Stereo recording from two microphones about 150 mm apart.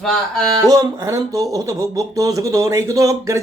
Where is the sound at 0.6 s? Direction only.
25° right (ahead or behind).